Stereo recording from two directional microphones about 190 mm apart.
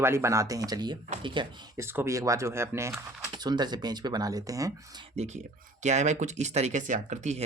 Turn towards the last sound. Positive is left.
turn(degrees=-40)  # may be behind; listen again after turning